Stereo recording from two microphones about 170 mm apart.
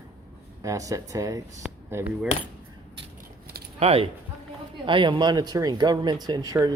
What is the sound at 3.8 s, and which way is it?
Speech, 35° right (ahead or behind).